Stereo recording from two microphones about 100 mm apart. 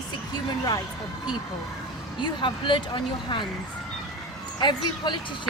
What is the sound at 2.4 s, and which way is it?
Speech, 55° left (ahead or behind).